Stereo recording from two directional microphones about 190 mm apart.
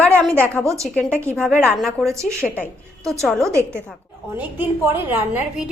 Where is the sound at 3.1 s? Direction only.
Centre (ahead or behind).